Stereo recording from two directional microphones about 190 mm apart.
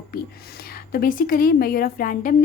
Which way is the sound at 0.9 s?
50° left (ahead or behind).